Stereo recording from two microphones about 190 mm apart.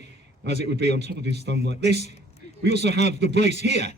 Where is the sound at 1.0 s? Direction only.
35° left (ahead or behind).